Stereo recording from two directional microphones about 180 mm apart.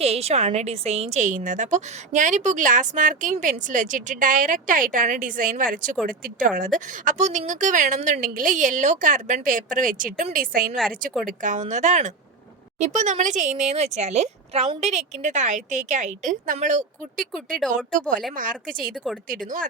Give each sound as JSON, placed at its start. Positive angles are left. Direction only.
{"t": 0.0, "sound": "a woman's voice", "side_deg": -35}
{"t": 19.1, "sound": "speech", "side_deg": 0}